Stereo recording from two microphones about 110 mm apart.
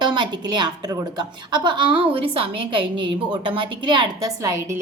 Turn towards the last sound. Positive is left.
turn(degrees=-45)  # may be behind; listen again after turning